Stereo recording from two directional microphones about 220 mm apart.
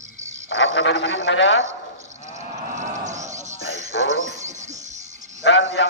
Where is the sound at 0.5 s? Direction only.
60° left (ahead or behind).